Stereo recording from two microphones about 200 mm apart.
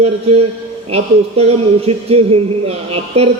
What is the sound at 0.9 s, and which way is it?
Speech, 30° right (ahead or behind).